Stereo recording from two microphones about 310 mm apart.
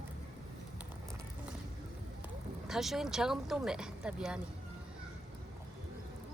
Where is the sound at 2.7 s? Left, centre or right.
Centre.